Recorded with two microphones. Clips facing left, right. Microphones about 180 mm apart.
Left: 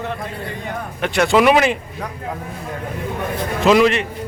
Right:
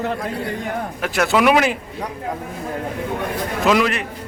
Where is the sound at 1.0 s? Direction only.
5° right (ahead or behind).